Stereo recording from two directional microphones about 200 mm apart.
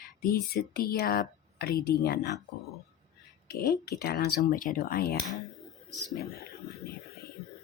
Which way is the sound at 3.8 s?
50° left (ahead or behind).